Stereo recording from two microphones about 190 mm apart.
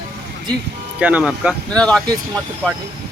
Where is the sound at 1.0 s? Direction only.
5° right (ahead or behind).